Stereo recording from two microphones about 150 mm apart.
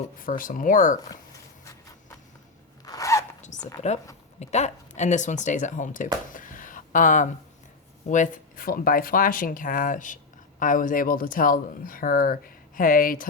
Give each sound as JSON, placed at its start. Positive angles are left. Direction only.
{"t": 0.3, "sound": "speech", "side_deg": 65}
{"t": 2.8, "sound": "zipper", "side_deg": 20}
{"t": 3.4, "sound": "dog", "side_deg": 55}
{"t": 4.4, "sound": "speech", "side_deg": 50}
{"t": 6.3, "sound": "a sound", "side_deg": 65}
{"t": 8.1, "sound": "speech", "side_deg": 60}